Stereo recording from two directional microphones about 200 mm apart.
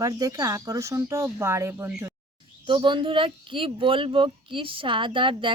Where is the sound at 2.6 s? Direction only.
25° right (ahead or behind).